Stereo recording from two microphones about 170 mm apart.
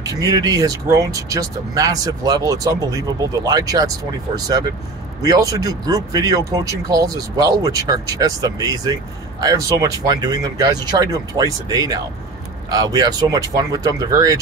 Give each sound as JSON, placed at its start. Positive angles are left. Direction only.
{"t": 0.0, "sound": "speech", "side_deg": -20}
{"t": 5.2, "sound": "speech", "side_deg": -20}